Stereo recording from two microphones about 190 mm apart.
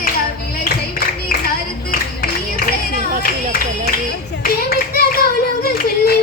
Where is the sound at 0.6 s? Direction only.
50° left (ahead or behind).